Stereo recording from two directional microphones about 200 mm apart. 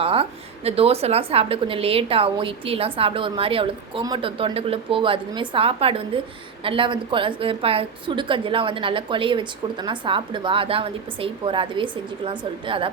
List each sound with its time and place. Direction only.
0.0 s a woman's voice: 30° right (ahead or behind)